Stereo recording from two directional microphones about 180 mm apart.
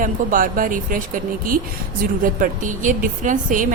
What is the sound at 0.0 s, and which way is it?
A woman's voice, 50° right (ahead or behind).